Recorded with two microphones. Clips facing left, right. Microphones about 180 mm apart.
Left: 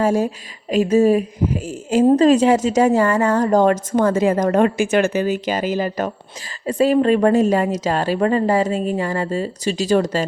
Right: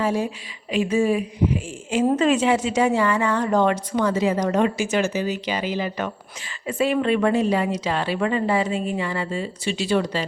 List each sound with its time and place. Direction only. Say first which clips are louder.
0.0 s speech: left 5 dB; 45° left (ahead or behind)